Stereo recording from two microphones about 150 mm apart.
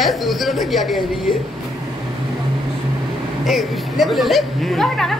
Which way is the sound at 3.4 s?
Centre (ahead or behind).